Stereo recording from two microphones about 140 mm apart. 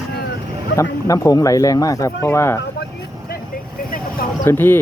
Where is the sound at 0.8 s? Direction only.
20° left (ahead or behind).